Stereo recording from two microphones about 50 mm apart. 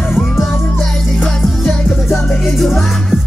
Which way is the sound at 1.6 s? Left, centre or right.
Centre.